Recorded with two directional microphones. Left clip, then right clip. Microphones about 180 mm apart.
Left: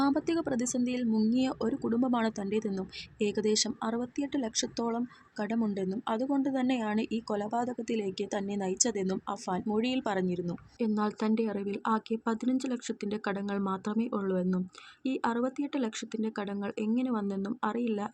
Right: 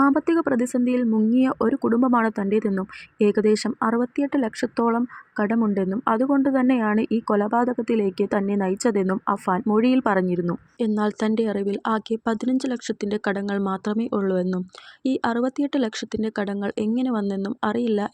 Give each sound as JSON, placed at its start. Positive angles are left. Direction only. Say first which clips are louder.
{"t": 0.0, "sound": "speech", "louder": "right 10 dB", "side_deg": -20}
{"t": 1.1, "sound": "speech", "louder": "right 8 dB", "side_deg": -40}
{"t": 1.6, "sound": "speech", "louder": "right 10 dB", "side_deg": -20}